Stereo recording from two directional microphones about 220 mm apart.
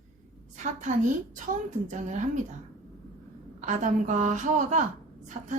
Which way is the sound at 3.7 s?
30° right (ahead or behind).